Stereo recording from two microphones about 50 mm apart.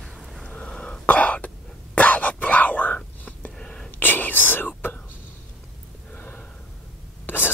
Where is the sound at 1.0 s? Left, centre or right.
Left.